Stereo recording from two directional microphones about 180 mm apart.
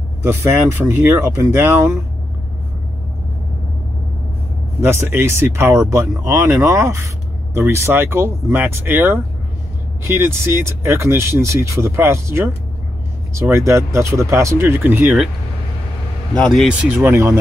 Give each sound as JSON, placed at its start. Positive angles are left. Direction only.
{"t": 0.2, "sound": "speech", "side_deg": -15}
{"t": 4.8, "sound": "speech", "side_deg": -15}
{"t": 16.3, "sound": "speech", "side_deg": 0}
{"t": 17.0, "sound": "speech", "side_deg": -15}